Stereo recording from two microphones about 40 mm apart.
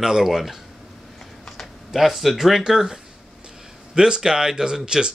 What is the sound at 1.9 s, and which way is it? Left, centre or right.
Speech, centre.